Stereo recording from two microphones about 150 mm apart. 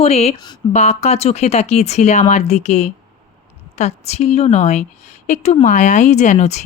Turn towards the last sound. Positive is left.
turn(degrees=50)  # may be behind; listen again after turning